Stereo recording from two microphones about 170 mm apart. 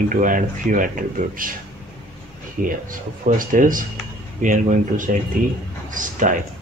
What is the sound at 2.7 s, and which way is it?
Speech, 55° right (ahead or behind).